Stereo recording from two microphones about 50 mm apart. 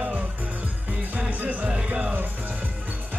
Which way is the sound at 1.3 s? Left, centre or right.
Right.